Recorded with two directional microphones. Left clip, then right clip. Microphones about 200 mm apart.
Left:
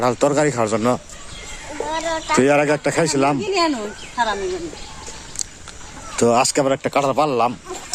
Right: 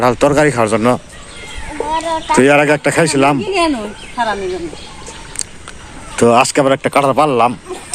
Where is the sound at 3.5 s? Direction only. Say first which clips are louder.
Right 4 dB; 25° right (ahead or behind).